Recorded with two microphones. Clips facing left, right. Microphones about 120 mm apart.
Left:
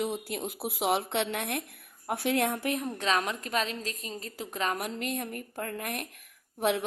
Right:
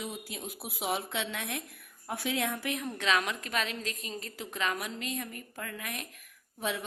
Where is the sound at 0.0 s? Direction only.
65° left (ahead or behind).